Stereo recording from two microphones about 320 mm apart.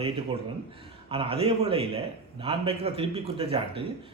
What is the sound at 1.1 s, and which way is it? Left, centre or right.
Speech, centre.